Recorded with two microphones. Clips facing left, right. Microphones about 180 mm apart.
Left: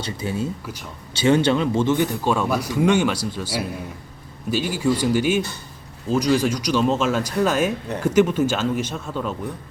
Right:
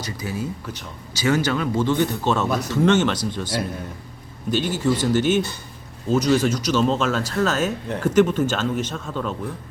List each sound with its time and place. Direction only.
0.0 s speech: 25° left (ahead or behind); by 9.3 s 10° left (ahead or behind)